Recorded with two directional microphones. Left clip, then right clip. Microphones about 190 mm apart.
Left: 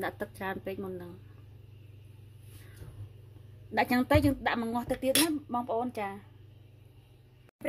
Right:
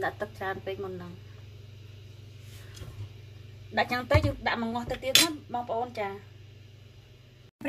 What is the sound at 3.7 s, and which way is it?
A woman's voice, 50° left (ahead or behind).